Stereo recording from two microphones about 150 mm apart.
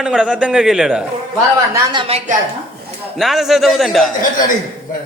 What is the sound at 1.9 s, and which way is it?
Speech, 35° right (ahead or behind).